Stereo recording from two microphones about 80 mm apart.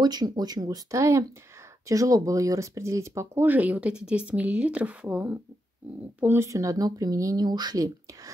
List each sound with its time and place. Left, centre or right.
0.0 s speech: right
3.4 s speech: right
6.1 s speech: right